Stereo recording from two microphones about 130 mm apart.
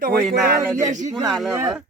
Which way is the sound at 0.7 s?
70° right (ahead or behind).